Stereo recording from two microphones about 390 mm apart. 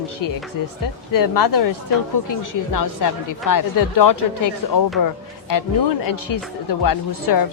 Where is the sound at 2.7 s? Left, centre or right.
Left.